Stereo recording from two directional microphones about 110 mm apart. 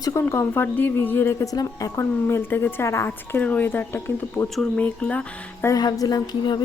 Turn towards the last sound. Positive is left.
turn(degrees=40)  # may be behind; listen again after turning